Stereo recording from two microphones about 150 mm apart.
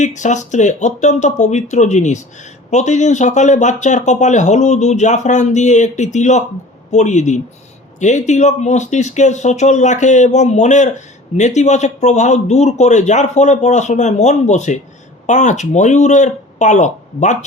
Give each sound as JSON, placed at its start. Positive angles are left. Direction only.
{"t": 0.0, "sound": "speech", "side_deg": 55}